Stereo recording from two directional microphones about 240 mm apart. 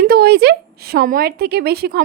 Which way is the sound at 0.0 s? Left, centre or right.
Right.